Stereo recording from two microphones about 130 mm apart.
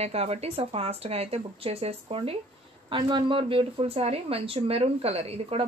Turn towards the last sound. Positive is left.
turn(degrees=-50)  # may be behind; listen again after turning